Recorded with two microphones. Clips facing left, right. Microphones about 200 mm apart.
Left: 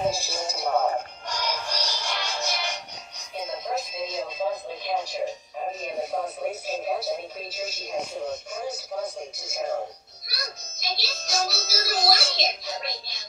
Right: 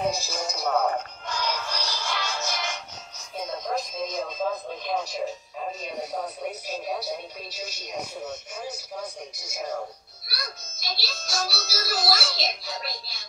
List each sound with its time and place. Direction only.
0.0 s music: 30° left (ahead or behind)
1.5 s music: 15° left (ahead or behind)
3.4 s television: 5° left (ahead or behind)
6.2 s television: 25° left (ahead or behind)
7.5 s music: 25° left (ahead or behind)
9.4 s music: 30° left (ahead or behind)